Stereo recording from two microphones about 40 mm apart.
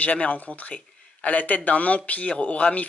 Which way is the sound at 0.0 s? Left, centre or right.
Left.